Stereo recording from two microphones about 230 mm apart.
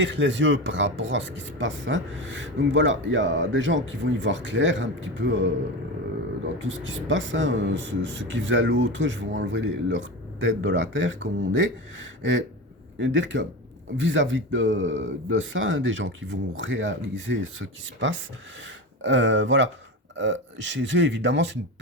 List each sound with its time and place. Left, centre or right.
0.0 s speech: right
6.6 s speech: right